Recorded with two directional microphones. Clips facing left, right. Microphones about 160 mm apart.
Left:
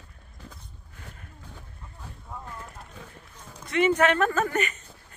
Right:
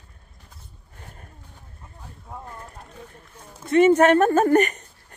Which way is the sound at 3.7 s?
40° right (ahead or behind).